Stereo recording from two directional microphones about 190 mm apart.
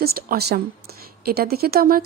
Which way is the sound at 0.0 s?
50° right (ahead or behind).